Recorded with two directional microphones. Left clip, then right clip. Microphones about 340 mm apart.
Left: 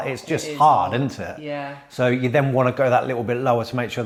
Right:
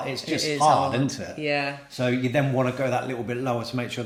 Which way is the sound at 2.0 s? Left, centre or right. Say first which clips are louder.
Left 5 dB; left.